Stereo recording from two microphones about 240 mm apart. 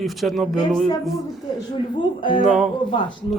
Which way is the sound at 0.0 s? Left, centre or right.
Centre.